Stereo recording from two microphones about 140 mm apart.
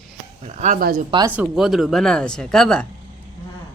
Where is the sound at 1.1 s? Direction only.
30° right (ahead or behind).